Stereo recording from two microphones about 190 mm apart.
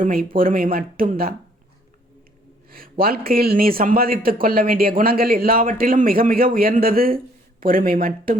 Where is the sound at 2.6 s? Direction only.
50° right (ahead or behind).